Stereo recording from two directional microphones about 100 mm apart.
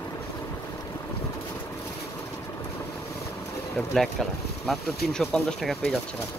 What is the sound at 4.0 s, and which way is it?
Speech, centre (ahead or behind).